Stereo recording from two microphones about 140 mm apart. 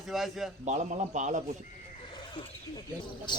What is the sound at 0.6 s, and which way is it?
Speech, 55° right (ahead or behind).